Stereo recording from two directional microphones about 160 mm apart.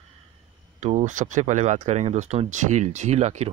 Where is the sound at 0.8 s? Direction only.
45° right (ahead or behind).